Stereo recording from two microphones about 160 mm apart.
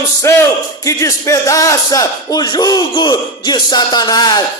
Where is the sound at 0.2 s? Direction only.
15° left (ahead or behind).